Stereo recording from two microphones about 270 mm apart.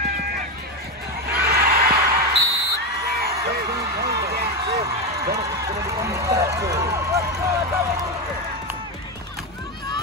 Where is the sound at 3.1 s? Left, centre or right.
Right.